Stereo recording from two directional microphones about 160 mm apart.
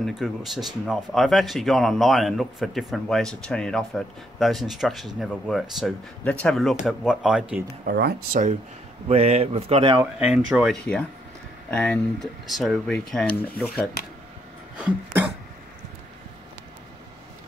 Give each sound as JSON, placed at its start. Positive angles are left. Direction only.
{"t": 0.0, "sound": "speech", "side_deg": 0}
{"t": 7.8, "sound": "speech", "side_deg": -70}
{"t": 9.1, "sound": "a man's voice", "side_deg": -40}
{"t": 10.1, "sound": "speech", "side_deg": -5}
{"t": 10.8, "sound": "speech", "side_deg": 5}
{"t": 14.8, "sound": "a sound", "side_deg": -10}